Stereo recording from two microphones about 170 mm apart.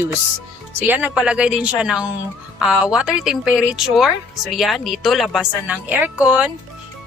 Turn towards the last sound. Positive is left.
turn(degrees=-5)  # may be behind; listen again after turning